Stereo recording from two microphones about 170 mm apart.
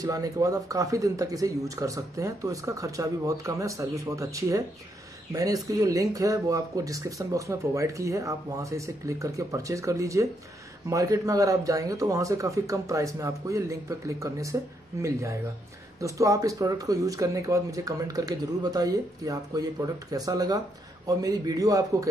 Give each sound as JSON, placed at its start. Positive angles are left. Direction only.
{"t": 0.0, "sound": "speech", "side_deg": -20}